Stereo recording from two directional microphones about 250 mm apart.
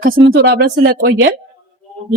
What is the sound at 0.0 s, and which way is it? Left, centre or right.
Speech, right.